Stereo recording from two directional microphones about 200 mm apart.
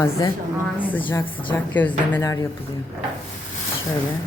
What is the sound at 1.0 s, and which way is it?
Speech, 25° left (ahead or behind).